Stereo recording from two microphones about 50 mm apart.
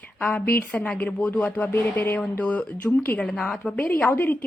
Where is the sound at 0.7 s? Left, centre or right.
Left.